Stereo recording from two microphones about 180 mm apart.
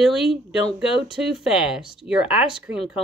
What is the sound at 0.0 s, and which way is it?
Speech, centre (ahead or behind).